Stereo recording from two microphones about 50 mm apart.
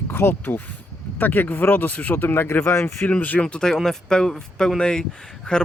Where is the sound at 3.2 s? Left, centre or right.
Left.